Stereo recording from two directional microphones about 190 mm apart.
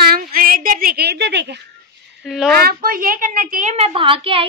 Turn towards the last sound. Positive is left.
turn(degrees=-30)  # may be behind; listen again after turning